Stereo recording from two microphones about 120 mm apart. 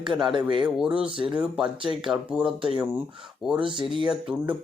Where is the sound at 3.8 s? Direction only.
45° right (ahead or behind).